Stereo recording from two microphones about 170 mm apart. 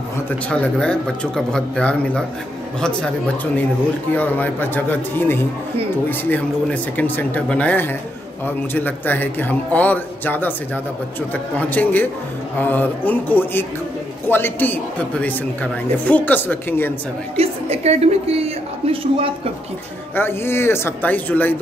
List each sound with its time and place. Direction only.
0.3 s a woman's voice: 5° left (ahead or behind)
17.4 s a woman's voice: 40° right (ahead or behind)
20.2 s a woman's voice: 15° left (ahead or behind)